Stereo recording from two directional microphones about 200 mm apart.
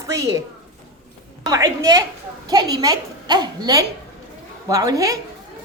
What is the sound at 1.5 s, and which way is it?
A woman's voice, 15° right (ahead or behind).